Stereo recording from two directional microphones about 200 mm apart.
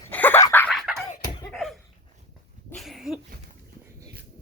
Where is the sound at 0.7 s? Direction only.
Centre (ahead or behind).